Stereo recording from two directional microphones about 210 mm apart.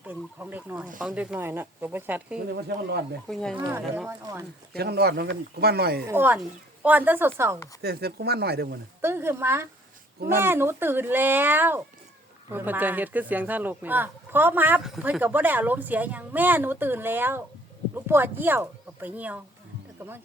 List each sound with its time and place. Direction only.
0.0 s speech: 10° right (ahead or behind)
2.5 s speech: 50° right (ahead or behind)
3.3 s speech: 5° left (ahead or behind)
3.7 s speech: 10° right (ahead or behind)
4.8 s speech: 50° right (ahead or behind)
6.1 s speech: 10° right (ahead or behind)
7.8 s speech: 50° right (ahead or behind)
9.0 s speech: 10° right (ahead or behind)